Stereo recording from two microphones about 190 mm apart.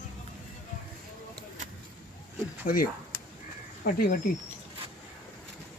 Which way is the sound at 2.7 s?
50° left (ahead or behind).